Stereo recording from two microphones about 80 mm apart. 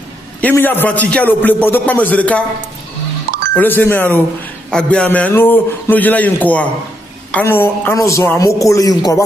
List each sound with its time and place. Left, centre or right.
0.4 s a man's voice: left
3.5 s a man's voice: left
4.6 s a man's voice: centre; by 7.9 s left
7.9 s a man's voice: left